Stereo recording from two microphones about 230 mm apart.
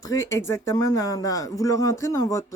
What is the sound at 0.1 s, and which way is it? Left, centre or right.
Speech, centre.